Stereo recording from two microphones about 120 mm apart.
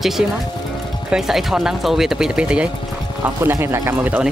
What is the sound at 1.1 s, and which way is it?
Speech, 5° right (ahead or behind).